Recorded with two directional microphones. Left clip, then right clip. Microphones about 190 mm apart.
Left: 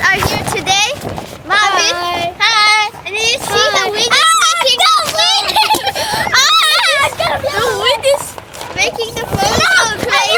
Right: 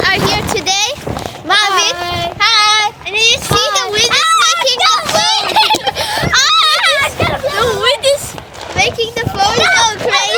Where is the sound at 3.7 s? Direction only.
40° right (ahead or behind).